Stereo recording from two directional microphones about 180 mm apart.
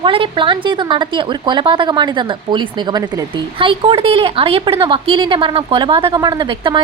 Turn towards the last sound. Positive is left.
turn(degrees=-25)  # may be behind; listen again after turning